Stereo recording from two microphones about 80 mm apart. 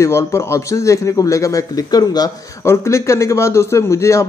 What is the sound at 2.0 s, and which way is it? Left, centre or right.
Speech, left.